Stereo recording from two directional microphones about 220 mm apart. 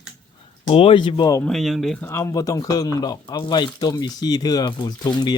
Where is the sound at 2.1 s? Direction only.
15° left (ahead or behind).